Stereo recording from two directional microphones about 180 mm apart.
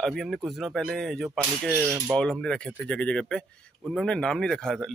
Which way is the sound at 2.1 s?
5° left (ahead or behind).